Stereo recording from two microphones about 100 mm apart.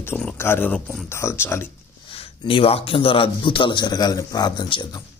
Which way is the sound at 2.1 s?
70° left (ahead or behind).